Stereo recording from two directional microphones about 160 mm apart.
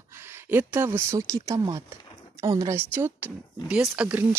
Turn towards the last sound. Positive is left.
turn(degrees=-10)  # may be behind; listen again after turning